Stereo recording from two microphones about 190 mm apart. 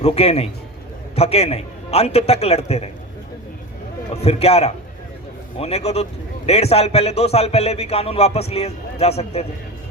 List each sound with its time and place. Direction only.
0.0 s a man's voice: 30° left (ahead or behind)
4.1 s a man's voice: 35° left (ahead or behind)